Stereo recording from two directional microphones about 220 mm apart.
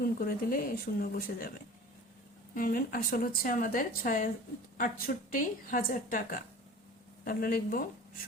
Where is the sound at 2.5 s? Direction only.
40° left (ahead or behind).